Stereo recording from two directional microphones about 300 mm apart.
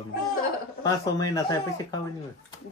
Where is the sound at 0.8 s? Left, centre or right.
Centre.